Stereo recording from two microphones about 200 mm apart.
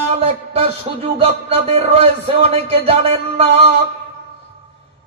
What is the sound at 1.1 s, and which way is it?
A man's voice, 30° right (ahead or behind).